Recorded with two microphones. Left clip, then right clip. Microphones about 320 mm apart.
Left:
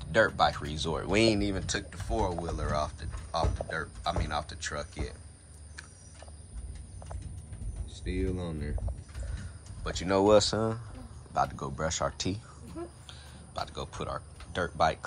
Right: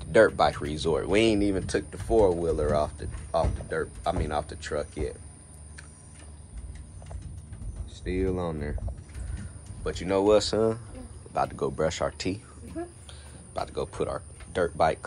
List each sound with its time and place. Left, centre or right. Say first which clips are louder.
0.0 s speech: right 5 dB; centre
7.9 s speech: right 6 dB; centre
9.8 s speech: right 1 dB; centre
13.5 s speech: right 5 dB; centre